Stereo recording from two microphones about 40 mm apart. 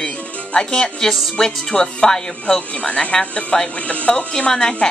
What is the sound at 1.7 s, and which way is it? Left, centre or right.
Speech, left.